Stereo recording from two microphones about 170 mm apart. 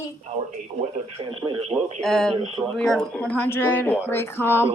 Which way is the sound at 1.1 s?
30° right (ahead or behind).